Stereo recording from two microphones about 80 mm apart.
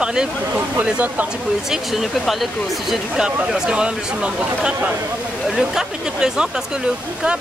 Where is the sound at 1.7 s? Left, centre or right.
Centre.